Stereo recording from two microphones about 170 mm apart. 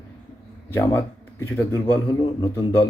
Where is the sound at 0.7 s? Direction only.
10° left (ahead or behind).